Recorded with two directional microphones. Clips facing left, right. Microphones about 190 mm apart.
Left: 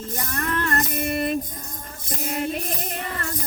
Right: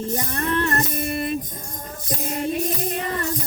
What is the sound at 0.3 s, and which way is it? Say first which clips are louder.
Music: even; 25° right (ahead or behind).